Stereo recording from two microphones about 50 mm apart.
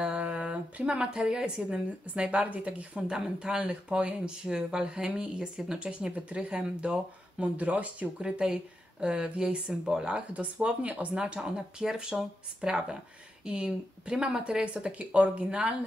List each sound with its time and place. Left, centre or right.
0.0 s a sound: right
1.6 s speech: right
8.2 s speech: centre